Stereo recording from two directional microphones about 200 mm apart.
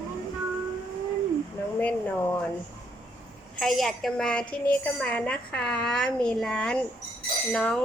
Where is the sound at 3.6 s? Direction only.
Centre (ahead or behind).